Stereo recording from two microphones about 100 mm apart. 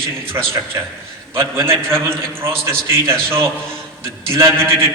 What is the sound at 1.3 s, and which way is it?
A man's voice, 25° right (ahead or behind).